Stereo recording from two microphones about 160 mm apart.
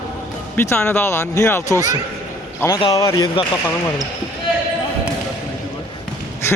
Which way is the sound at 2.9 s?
20° left (ahead or behind).